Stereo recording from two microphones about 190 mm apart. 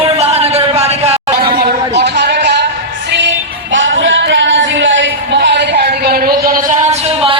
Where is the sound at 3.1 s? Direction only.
70° right (ahead or behind); by 6.3 s 55° right (ahead or behind).